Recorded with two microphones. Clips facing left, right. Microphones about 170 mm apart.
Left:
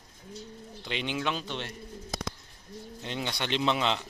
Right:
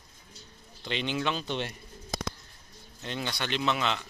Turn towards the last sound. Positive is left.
turn(degrees=25)  # may be behind; listen again after turning